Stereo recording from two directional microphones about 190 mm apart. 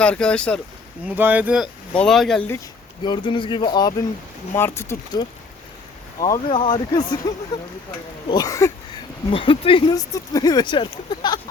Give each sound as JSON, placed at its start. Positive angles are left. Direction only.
{"t": 0.0, "sound": "speech", "side_deg": 5}
{"t": 1.0, "sound": "speech", "side_deg": -10}
{"t": 3.0, "sound": "speech", "side_deg": 25}
{"t": 9.3, "sound": "speech", "side_deg": 30}